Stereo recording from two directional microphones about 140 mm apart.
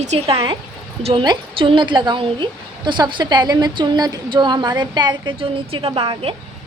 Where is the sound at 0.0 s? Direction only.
50° right (ahead or behind).